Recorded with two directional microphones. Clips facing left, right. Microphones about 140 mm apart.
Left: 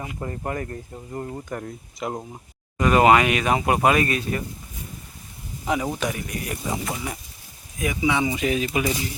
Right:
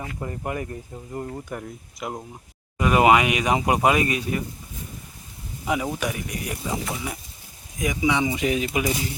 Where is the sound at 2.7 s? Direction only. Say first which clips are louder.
Left 1 dB; 10° right (ahead or behind).